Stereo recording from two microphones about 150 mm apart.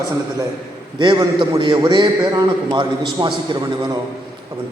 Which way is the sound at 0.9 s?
30° right (ahead or behind).